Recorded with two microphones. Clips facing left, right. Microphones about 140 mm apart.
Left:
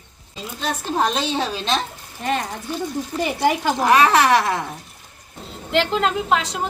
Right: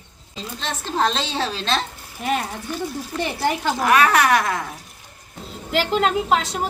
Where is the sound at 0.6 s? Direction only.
10° left (ahead or behind).